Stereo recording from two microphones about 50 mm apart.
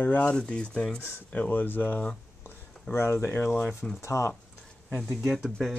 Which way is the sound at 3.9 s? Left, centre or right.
Left.